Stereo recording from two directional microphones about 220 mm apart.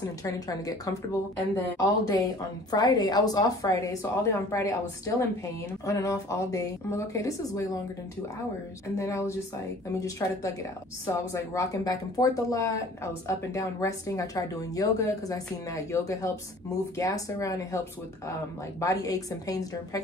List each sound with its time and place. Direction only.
0.2 s speech: 15° left (ahead or behind)
8.9 s speech: 15° left (ahead or behind)